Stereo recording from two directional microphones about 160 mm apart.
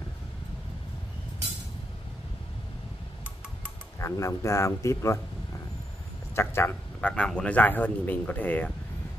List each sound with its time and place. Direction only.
4.0 s speech: 20° left (ahead or behind)
6.3 s a man's voice: 15° left (ahead or behind)